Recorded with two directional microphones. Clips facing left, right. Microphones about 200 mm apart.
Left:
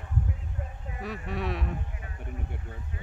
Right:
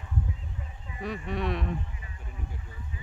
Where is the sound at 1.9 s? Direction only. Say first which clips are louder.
Left 5 dB; 60° left (ahead or behind).